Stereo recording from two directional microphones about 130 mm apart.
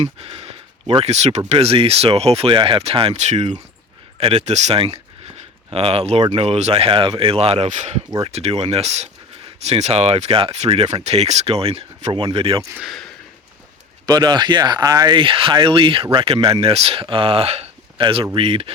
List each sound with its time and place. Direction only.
0.0 s speech: 50° right (ahead or behind)
12.8 s speech: centre (ahead or behind)
14.1 s speech: 35° right (ahead or behind)